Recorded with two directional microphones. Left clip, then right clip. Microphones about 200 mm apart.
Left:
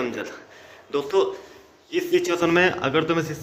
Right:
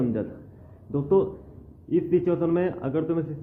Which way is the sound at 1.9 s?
Centre (ahead or behind).